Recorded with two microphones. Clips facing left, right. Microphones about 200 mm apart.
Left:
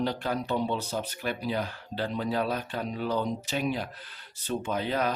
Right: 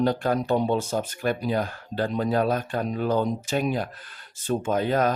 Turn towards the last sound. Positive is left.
turn(degrees=-45)  # may be behind; listen again after turning